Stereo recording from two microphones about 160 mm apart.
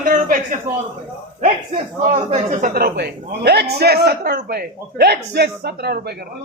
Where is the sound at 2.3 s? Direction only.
45° right (ahead or behind).